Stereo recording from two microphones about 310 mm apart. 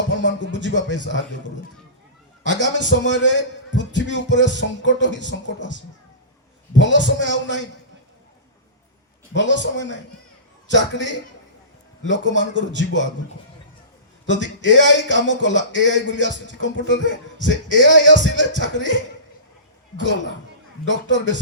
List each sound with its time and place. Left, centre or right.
0.1 s music: left
0.9 s speech: left
2.5 s speech: left
6.7 s speech: left
9.3 s speech: left
14.3 s speech: left
20.0 s speech: left